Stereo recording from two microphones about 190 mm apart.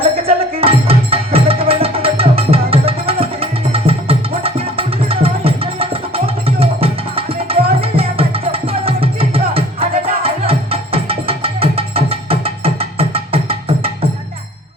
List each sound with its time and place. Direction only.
0.3 s music: 30° right (ahead or behind)